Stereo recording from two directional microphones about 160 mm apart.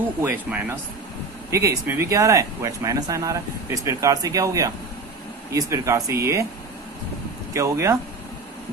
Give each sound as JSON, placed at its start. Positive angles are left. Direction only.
{"t": 0.2, "sound": "speech", "side_deg": -15}
{"t": 7.5, "sound": "speech", "side_deg": -20}